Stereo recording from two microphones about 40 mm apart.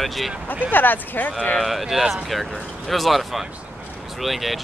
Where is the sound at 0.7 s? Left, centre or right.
Left.